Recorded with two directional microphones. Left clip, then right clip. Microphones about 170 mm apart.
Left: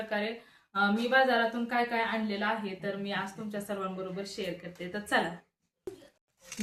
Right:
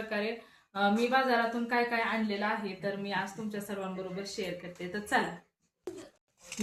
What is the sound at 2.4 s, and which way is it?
A woman's voice, 20° left (ahead or behind).